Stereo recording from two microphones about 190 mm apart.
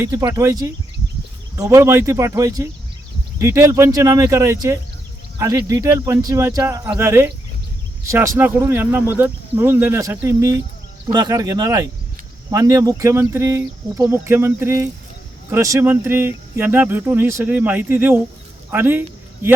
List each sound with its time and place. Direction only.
0.0 s a man's voice: 15° right (ahead or behind)